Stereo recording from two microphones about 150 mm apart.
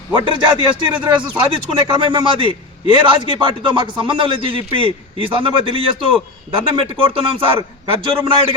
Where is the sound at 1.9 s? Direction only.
30° right (ahead or behind).